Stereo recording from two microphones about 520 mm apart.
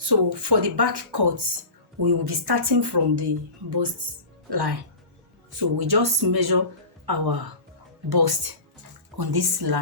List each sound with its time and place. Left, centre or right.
0.0 s speech: right
4.4 s speech: right